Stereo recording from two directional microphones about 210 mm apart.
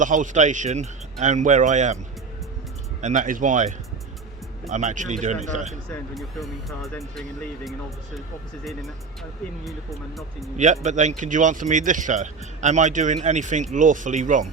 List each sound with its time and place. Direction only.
0.0 s speech: 35° right (ahead or behind)
3.0 s speech: 35° right (ahead or behind)
5.9 s speech: centre (ahead or behind)
9.6 s speech: centre (ahead or behind)
10.6 s speech: 35° right (ahead or behind)